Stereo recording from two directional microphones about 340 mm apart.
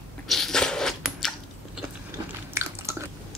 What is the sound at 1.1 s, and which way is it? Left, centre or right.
Chewing, centre.